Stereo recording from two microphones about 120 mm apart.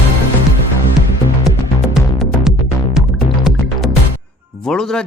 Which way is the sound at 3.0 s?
Centre (ahead or behind).